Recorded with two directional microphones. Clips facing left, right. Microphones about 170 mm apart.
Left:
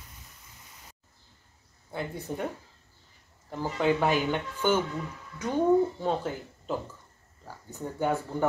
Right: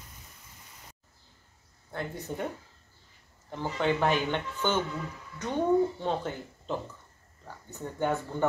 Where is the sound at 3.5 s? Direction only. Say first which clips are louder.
Left 2 dB; 5° left (ahead or behind).